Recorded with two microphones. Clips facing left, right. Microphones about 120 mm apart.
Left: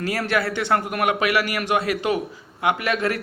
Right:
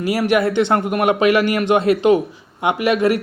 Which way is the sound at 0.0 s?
15° right (ahead or behind).